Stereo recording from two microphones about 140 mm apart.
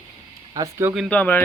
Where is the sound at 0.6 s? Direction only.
20° right (ahead or behind).